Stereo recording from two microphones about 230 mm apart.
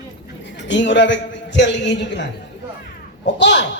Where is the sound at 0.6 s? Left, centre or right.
Left.